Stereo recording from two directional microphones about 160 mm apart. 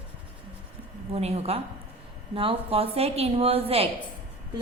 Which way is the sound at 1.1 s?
40° right (ahead or behind).